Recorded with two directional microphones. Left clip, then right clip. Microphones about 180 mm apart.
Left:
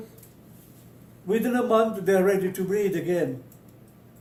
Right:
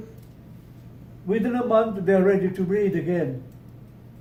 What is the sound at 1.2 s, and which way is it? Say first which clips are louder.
Speech: even; 55° left (ahead or behind).